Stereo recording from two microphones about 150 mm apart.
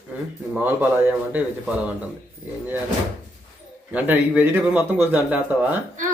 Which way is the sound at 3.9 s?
10° right (ahead or behind).